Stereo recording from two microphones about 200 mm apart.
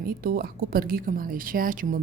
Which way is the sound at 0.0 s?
45° right (ahead or behind).